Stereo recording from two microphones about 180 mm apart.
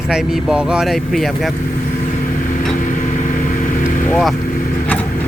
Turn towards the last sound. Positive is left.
turn(degrees=0)  # may be behind; listen again after turning